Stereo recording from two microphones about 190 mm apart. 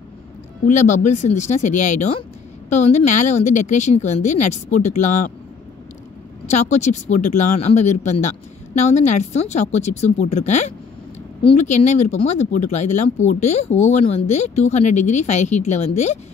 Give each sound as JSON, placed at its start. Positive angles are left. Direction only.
{"t": 0.7, "sound": "speech", "side_deg": 40}
{"t": 6.5, "sound": "speech", "side_deg": 40}